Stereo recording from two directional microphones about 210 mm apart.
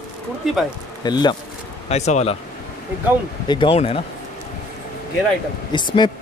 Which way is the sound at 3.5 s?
25° left (ahead or behind).